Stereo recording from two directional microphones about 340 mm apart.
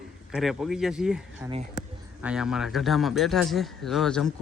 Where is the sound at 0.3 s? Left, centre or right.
Centre.